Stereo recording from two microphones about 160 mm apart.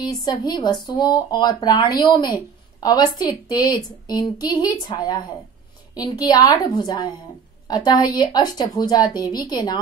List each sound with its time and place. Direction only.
0.0 s a woman's voice: 25° left (ahead or behind)